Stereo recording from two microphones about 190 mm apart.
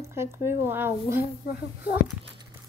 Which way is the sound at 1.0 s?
50° left (ahead or behind).